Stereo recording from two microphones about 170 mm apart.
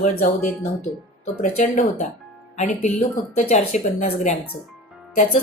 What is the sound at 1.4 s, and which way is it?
Speech, 45° left (ahead or behind).